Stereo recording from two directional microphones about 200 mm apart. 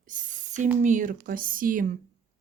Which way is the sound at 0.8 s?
40° right (ahead or behind).